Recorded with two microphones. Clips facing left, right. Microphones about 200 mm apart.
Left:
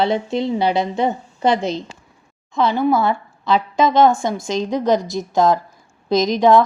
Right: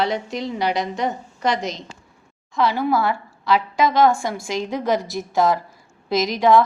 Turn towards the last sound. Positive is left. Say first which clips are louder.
# left 3 dB
turn(degrees=20)  # may be behind; listen again after turning